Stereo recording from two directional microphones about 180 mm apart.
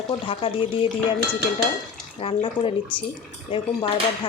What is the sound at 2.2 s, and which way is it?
Speech, 30° left (ahead or behind).